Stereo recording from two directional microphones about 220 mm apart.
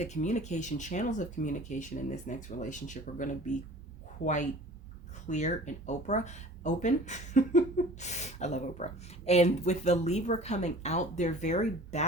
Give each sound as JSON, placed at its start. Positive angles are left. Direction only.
{"t": 0.0, "sound": "speech", "side_deg": 30}
{"t": 5.3, "sound": "speech", "side_deg": 35}